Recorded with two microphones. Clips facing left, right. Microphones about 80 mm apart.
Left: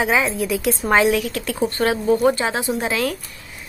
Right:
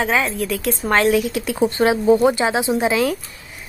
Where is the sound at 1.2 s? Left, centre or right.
Centre.